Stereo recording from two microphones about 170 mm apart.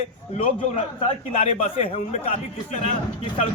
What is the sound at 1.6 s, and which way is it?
A man's voice, 40° left (ahead or behind).